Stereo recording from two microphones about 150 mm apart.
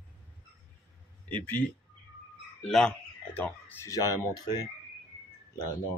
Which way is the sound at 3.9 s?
25° left (ahead or behind).